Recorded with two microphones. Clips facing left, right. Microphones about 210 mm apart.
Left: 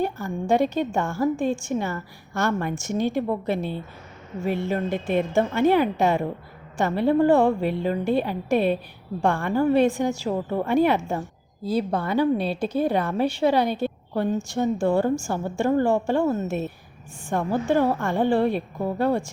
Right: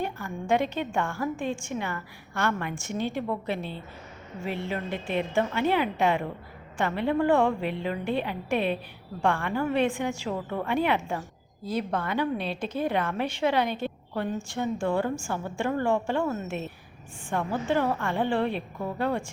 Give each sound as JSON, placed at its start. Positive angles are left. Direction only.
{"t": 0.0, "sound": "a woman's voice", "side_deg": 35}